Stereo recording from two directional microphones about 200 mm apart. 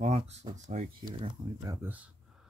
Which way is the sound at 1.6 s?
15° right (ahead or behind).